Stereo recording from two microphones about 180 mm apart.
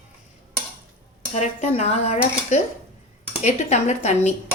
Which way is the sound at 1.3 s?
40° left (ahead or behind).